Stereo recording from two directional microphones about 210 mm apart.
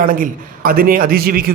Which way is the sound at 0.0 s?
40° right (ahead or behind).